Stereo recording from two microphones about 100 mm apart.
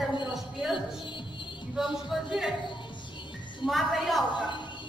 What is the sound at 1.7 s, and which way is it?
Music, centre (ahead or behind).